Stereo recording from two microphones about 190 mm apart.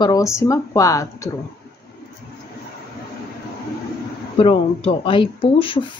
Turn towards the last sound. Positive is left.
turn(degrees=25)  # may be behind; listen again after turning